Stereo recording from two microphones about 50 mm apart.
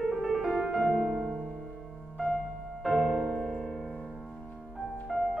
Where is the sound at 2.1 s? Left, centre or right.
Left.